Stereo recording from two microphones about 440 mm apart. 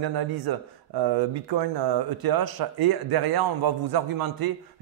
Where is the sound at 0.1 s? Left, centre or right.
Right.